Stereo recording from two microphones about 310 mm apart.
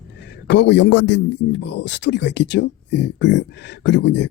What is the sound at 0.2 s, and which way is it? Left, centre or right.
A man's voice, left.